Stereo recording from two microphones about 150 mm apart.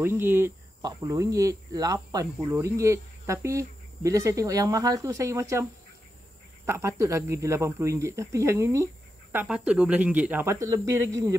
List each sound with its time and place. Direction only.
0.0 s speech: 15° right (ahead or behind)